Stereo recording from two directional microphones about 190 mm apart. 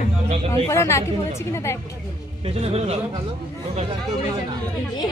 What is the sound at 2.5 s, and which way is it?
Speech, 30° right (ahead or behind).